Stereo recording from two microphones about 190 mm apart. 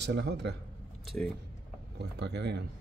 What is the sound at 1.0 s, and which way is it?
Speech, centre (ahead or behind).